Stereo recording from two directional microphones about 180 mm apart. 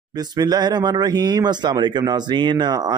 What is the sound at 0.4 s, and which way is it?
Speech, 20° right (ahead or behind).